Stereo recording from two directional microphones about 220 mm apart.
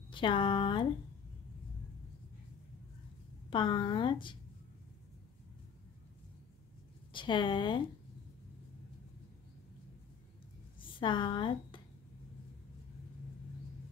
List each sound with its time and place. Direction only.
0.1 s a woman's voice: 20° left (ahead or behind)
3.4 s a woman's voice: 20° left (ahead or behind)
7.1 s a woman's voice: 20° left (ahead or behind)
10.8 s speech: 20° left (ahead or behind)